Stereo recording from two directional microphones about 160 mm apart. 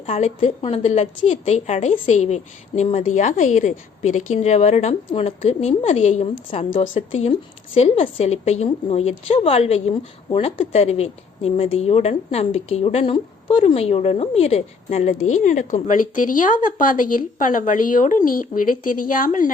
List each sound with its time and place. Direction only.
0.0 s speech: 45° left (ahead or behind)